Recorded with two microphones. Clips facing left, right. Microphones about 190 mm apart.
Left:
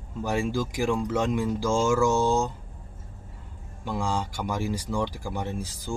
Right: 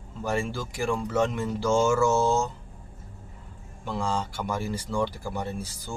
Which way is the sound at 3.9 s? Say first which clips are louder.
Even; 15° left (ahead or behind).